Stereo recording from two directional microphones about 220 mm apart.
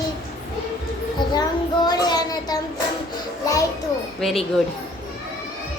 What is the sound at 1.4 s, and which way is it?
Child singing, 20° left (ahead or behind).